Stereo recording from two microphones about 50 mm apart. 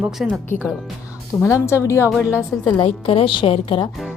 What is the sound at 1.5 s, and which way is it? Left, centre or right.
Speech, left.